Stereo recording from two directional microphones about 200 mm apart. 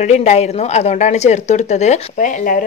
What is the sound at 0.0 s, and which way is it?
Speech, 35° left (ahead or behind).